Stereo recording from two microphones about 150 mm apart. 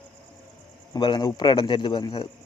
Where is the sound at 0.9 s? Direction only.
30° left (ahead or behind).